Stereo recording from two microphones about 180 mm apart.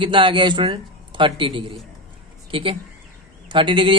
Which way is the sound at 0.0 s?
30° right (ahead or behind).